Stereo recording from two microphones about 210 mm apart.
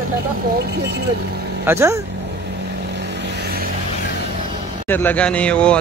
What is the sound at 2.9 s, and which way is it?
Vehicle, 55° right (ahead or behind).